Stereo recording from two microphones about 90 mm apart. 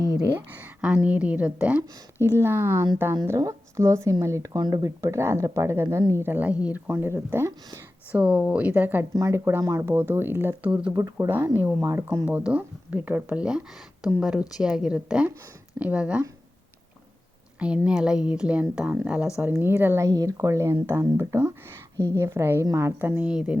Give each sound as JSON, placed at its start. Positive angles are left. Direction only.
{"t": 0.3, "sound": "a woman's voice", "side_deg": -20}
{"t": 8.1, "sound": "speech", "side_deg": -15}
{"t": 9.1, "sound": "speech", "side_deg": -35}
{"t": 10.7, "sound": "speech", "side_deg": -10}
{"t": 10.9, "sound": "a woman's voice", "side_deg": -40}
{"t": 11.3, "sound": "a woman's voice", "side_deg": -25}
{"t": 12.2, "sound": "speech", "side_deg": -15}
{"t": 17.6, "sound": "speech", "side_deg": -10}
{"t": 19.4, "sound": "speech", "side_deg": -25}
{"t": 20.1, "sound": "a woman's voice", "side_deg": -40}